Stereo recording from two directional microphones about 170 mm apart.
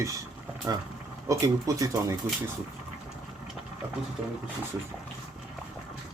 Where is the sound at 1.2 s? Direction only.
20° right (ahead or behind).